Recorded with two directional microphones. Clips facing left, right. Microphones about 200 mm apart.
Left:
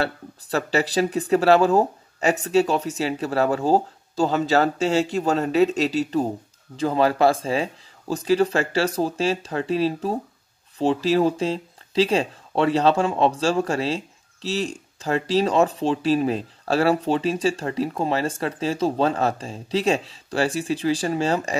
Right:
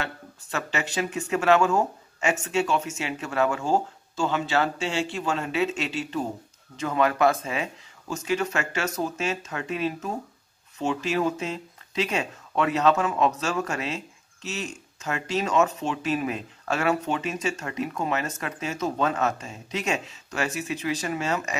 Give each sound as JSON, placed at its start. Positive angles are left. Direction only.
{"t": 0.0, "sound": "speech", "side_deg": 35}